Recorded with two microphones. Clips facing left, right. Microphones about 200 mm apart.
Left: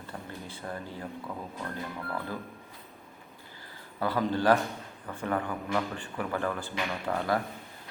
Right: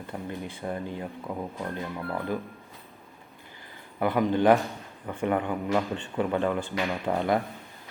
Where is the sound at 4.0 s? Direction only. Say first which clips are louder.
Right 5 dB; 20° right (ahead or behind).